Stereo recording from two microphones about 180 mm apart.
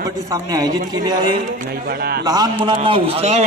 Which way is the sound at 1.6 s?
55° right (ahead or behind).